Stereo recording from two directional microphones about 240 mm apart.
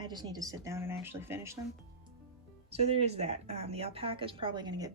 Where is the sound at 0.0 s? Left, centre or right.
Centre.